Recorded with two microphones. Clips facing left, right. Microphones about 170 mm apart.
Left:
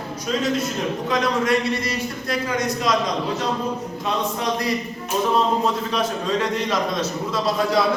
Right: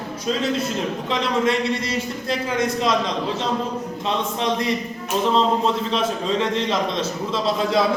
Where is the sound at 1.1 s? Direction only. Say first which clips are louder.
Even; 25° right (ahead or behind).